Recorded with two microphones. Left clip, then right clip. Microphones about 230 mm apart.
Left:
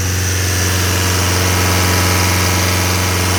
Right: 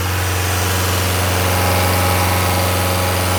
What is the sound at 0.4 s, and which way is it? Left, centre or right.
Vehicle, left.